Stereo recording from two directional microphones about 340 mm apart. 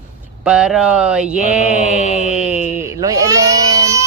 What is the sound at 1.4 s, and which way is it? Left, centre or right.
Speech, centre.